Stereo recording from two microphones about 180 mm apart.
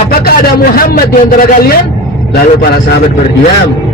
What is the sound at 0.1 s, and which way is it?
A man's voice, 55° left (ahead or behind).